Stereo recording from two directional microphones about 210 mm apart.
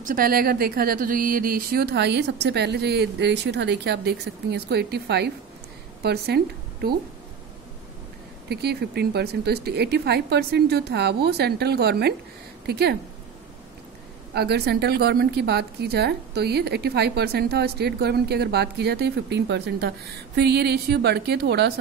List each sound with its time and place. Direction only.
0.0 s a woman's voice: 45° right (ahead or behind)
8.5 s a woman's voice: 50° right (ahead or behind)
14.3 s a woman's voice: 50° right (ahead or behind)